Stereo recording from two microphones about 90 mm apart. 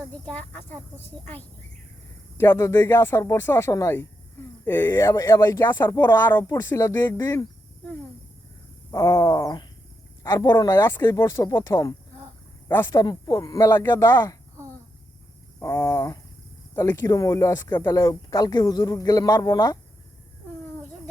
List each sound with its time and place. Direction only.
0.3 s speech: 20° left (ahead or behind)
8.9 s speech: 35° left (ahead or behind)
10.3 s speech: 25° left (ahead or behind)
12.9 s speech: 45° left (ahead or behind)
13.7 s speech: 25° left (ahead or behind)
15.5 s a sound: 35° left (ahead or behind)
16.7 s speech: 35° left (ahead or behind)
17.7 s speech: 20° left (ahead or behind)
17.9 s speech: 40° left (ahead or behind)